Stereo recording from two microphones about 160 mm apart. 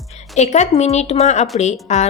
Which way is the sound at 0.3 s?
45° left (ahead or behind).